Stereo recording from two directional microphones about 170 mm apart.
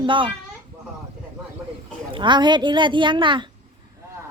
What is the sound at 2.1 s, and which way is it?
A woman's voice, 25° right (ahead or behind).